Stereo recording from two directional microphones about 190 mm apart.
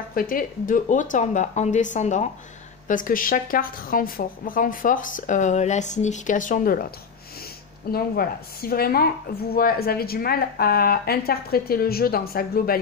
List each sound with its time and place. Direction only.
0.1 s a woman's voice: 50° left (ahead or behind)
7.9 s a woman's voice: 50° left (ahead or behind)